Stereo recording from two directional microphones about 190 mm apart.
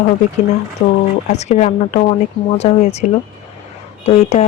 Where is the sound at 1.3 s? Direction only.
40° left (ahead or behind).